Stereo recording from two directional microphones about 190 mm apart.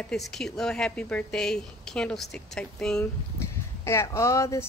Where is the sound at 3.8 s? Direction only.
15° left (ahead or behind).